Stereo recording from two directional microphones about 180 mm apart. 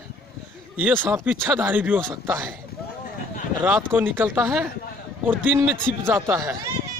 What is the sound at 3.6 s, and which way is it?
Speech, 10° right (ahead or behind).